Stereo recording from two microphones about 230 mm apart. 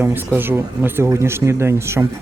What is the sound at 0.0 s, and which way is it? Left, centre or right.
Speech, centre.